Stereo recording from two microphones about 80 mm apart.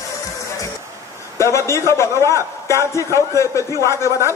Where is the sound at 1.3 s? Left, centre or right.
Left.